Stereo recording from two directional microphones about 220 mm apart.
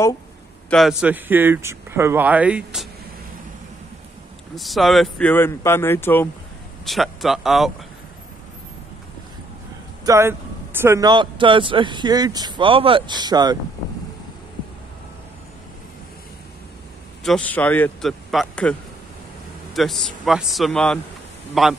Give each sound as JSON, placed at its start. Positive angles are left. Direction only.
{"t": 0.7, "sound": "a man's voice", "side_deg": 0}
{"t": 4.6, "sound": "a man's voice", "side_deg": 0}
{"t": 10.0, "sound": "speech", "side_deg": -10}
{"t": 17.2, "sound": "a man's voice", "side_deg": 5}